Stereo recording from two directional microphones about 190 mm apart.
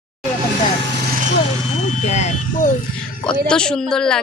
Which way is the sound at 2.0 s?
35° left (ahead or behind).